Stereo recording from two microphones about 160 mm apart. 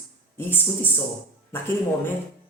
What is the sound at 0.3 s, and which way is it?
Speech, 10° left (ahead or behind).